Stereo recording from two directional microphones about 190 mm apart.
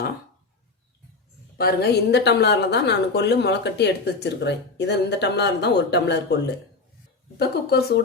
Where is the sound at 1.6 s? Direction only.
55° left (ahead or behind).